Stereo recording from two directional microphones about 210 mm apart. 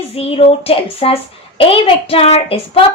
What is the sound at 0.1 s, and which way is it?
Speech, 25° left (ahead or behind).